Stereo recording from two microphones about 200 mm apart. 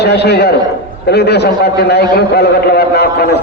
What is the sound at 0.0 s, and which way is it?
A man's voice, 55° left (ahead or behind).